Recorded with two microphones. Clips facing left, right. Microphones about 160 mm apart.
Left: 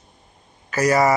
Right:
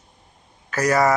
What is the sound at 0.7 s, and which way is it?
Speech, 5° left (ahead or behind).